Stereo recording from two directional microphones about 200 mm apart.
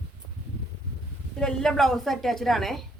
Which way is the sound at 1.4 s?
Centre (ahead or behind).